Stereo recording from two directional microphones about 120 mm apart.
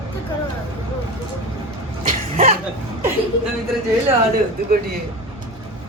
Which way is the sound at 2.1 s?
60° right (ahead or behind).